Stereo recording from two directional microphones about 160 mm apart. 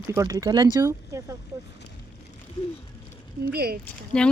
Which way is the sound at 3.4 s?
80° right.